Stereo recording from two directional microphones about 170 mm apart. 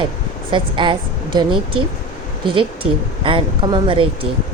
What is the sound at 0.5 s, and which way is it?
A woman's voice, 30° right (ahead or behind).